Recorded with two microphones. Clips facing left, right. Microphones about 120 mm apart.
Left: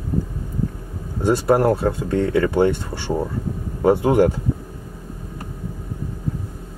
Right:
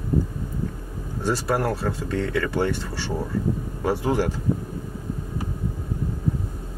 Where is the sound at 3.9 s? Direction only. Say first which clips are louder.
Left 8 dB; 50° left (ahead or behind).